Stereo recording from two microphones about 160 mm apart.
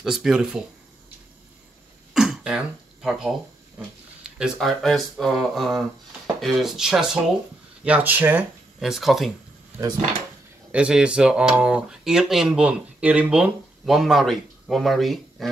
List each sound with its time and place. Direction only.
0.0 s speech: 5° right (ahead or behind)
2.1 s speech: 5° right (ahead or behind)
10.7 s speech: 5° right (ahead or behind)